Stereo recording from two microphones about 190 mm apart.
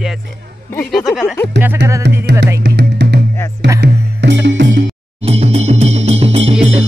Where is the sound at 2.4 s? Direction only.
65° right (ahead or behind).